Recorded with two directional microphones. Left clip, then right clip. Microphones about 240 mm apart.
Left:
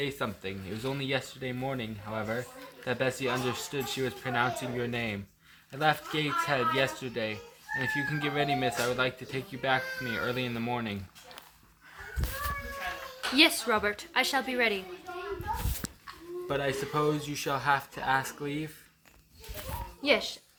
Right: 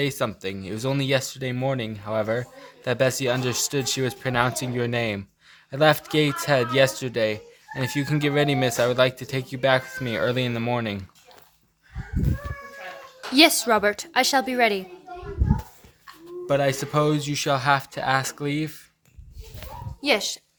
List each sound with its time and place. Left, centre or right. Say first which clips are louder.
0.0 s speech: right 8 dB; right
13.3 s speech: right 7 dB; right
16.5 s speech: right 9 dB; right
20.0 s speech: right 5 dB; right